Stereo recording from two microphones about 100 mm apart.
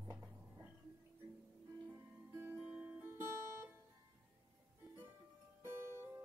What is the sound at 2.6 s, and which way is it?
Music, 10° right (ahead or behind).